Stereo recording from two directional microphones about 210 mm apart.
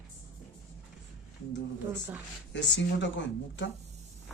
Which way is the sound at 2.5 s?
60° left (ahead or behind).